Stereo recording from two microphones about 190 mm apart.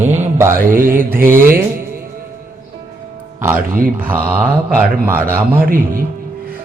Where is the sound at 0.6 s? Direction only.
45° right (ahead or behind).